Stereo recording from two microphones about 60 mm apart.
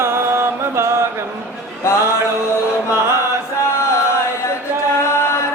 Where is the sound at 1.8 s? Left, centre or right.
Left.